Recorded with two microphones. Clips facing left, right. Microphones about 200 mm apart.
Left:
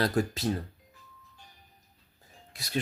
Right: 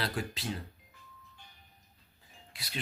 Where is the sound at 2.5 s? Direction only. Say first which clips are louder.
Left 4 dB; 45° left (ahead or behind).